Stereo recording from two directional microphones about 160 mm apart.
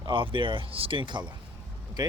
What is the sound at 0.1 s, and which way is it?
Speech, 30° right (ahead or behind).